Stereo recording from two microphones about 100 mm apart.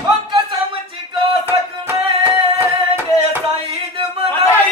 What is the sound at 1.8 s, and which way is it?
Music, 20° right (ahead or behind).